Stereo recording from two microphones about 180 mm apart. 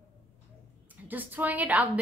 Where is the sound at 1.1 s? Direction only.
10° right (ahead or behind).